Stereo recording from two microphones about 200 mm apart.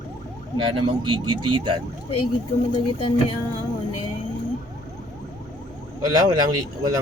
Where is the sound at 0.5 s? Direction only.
25° right (ahead or behind).